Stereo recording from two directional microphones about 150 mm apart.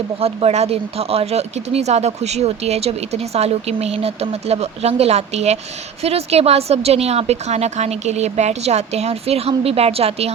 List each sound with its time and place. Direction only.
0.2 s speech: 40° right (ahead or behind)